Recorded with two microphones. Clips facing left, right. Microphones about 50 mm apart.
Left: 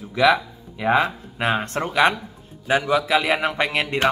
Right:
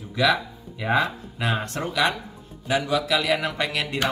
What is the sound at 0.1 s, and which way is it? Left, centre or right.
Speech, centre.